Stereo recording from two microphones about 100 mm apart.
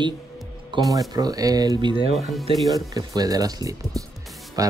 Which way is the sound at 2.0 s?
70° right (ahead or behind).